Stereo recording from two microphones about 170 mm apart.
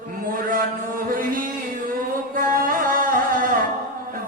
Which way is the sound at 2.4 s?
55° right (ahead or behind).